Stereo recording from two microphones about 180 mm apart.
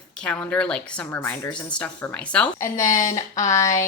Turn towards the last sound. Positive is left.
turn(degrees=20)  # may be behind; listen again after turning